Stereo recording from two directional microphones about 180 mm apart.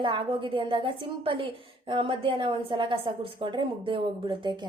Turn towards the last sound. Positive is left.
turn(degrees=-25)  # may be behind; listen again after turning